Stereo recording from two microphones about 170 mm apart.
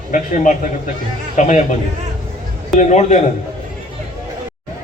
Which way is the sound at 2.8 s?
45° left (ahead or behind).